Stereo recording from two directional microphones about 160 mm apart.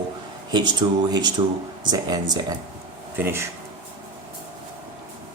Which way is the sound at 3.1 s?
15° right (ahead or behind).